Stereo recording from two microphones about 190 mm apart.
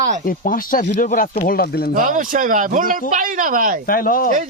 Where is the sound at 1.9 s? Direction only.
45° right (ahead or behind).